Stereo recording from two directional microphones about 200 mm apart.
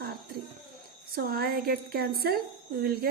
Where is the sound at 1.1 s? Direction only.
50° right (ahead or behind).